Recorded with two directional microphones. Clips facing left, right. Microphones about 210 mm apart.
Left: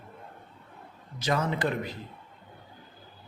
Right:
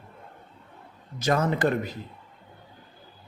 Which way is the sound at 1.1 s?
45° right (ahead or behind).